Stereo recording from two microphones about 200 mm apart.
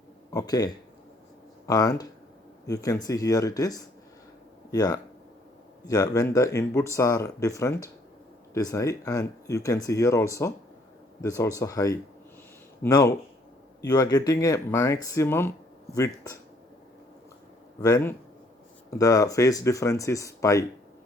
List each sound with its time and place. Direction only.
0.3 s speech: 20° left (ahead or behind)
17.7 s speech: 15° left (ahead or behind)